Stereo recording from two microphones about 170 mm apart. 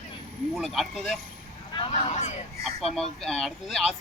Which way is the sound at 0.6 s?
Centre (ahead or behind).